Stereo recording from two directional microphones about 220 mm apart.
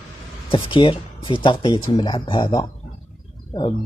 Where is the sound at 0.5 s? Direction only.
25° left (ahead or behind).